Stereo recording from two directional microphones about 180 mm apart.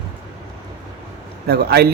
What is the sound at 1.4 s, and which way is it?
Speech, 65° right (ahead or behind).